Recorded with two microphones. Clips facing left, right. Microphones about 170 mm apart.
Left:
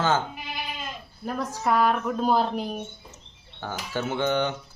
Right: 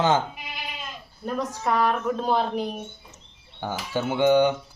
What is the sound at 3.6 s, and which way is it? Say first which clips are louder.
Speech: right 3 dB; 15° right (ahead or behind).